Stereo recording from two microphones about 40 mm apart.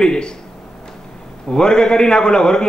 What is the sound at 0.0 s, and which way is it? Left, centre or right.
Speech, centre.